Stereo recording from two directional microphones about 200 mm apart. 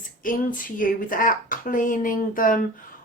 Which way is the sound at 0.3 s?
45° left (ahead or behind).